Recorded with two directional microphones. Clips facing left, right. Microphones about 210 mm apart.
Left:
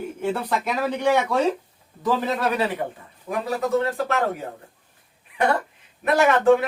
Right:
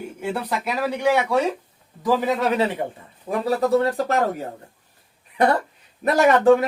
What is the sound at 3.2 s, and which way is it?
Speech, 35° right (ahead or behind).